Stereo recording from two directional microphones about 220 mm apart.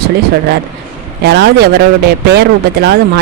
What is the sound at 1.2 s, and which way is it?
A man's voice, 50° right (ahead or behind).